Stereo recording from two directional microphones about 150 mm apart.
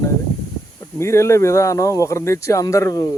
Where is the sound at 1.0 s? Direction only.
20° left (ahead or behind).